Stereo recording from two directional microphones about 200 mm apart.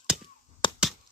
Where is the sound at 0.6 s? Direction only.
25° left (ahead or behind).